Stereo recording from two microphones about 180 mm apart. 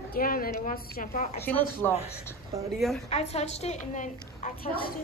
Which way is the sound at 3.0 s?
35° left (ahead or behind).